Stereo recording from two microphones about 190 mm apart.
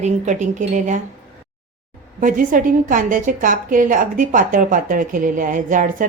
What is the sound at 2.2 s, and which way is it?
A woman's voice, 45° right (ahead or behind).